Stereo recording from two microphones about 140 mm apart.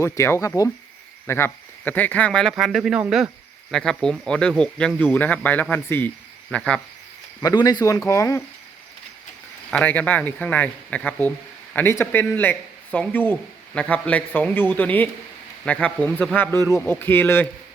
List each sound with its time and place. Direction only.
0.0 s speech: 20° left (ahead or behind)
7.4 s speech: 30° left (ahead or behind)
9.6 s speech: 10° left (ahead or behind)